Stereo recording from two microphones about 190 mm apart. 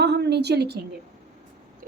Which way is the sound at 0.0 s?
60° right (ahead or behind).